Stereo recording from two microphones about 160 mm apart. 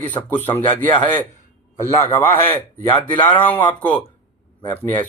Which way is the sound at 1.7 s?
50° left (ahead or behind).